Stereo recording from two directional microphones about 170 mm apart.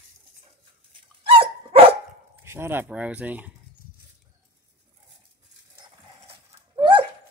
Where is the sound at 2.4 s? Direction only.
15° right (ahead or behind).